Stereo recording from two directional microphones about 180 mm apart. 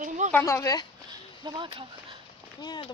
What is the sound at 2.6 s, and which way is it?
Speech, 25° left (ahead or behind).